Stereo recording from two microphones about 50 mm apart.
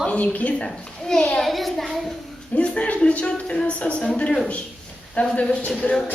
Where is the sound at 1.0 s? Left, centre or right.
Centre.